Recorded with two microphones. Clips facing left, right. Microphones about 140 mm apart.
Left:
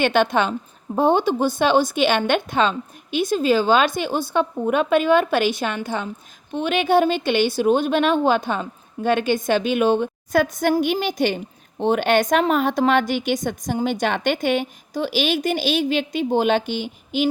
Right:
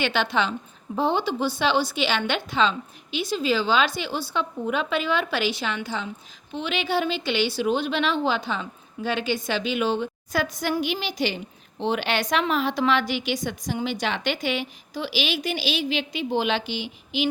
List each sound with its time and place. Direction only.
0.0 s a woman's voice: 50° left (ahead or behind)